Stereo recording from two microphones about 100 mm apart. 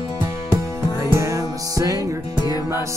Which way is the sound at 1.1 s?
30° right (ahead or behind).